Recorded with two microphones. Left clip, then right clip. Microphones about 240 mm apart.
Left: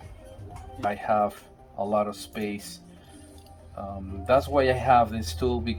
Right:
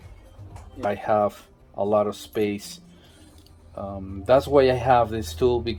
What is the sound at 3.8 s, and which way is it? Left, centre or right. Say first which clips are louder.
Speech: right 3 dB; right.